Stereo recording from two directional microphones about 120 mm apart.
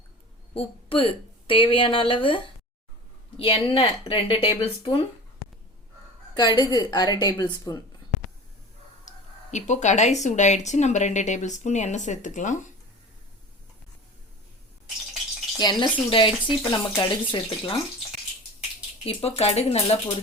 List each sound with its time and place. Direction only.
0.5 s speech: 50° left (ahead or behind)
6.3 s a woman's voice: 35° left (ahead or behind)
9.0 s speech: 80° left
15.5 s speech: 35° left (ahead or behind)
19.0 s speech: 60° left (ahead or behind)